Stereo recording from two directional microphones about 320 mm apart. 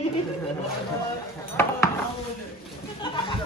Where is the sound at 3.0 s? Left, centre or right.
Centre.